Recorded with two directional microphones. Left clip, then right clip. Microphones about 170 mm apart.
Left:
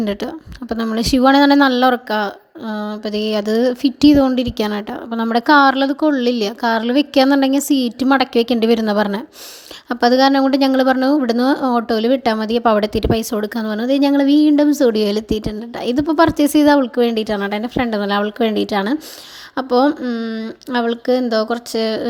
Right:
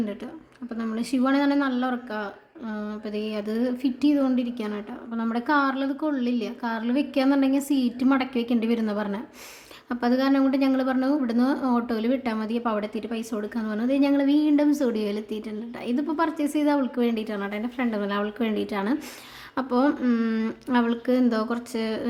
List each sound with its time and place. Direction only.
0.0 s speech: 50° left (ahead or behind)
2.7 s speech: 35° left (ahead or behind)
19.9 s speech: 20° left (ahead or behind)
20.7 s speech: 25° left (ahead or behind)